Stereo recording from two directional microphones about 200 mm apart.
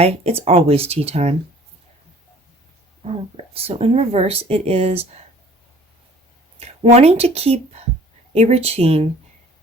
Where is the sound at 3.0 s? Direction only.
30° right (ahead or behind).